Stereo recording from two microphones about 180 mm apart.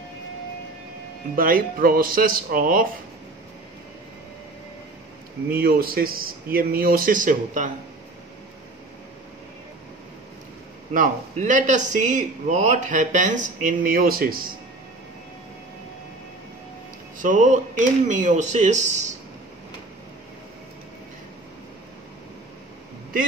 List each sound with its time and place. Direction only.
1.3 s a man's voice: 50° right (ahead or behind)
5.5 s a man's voice: 55° right (ahead or behind)
10.9 s a man's voice: 45° right (ahead or behind)
17.2 s a man's voice: 45° right (ahead or behind)